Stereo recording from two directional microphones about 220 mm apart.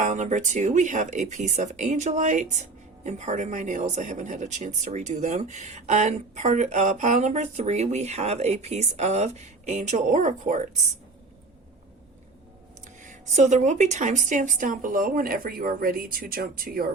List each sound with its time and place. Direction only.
0.0 s speech: 35° right (ahead or behind)
13.1 s speech: 35° right (ahead or behind)